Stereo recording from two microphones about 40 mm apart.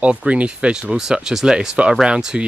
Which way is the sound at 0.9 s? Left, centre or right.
Centre.